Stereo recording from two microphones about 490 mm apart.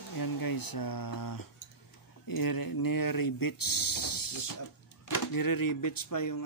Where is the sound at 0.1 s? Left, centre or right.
Left.